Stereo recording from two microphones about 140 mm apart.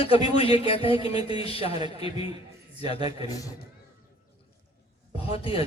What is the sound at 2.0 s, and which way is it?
Music, 40° left (ahead or behind).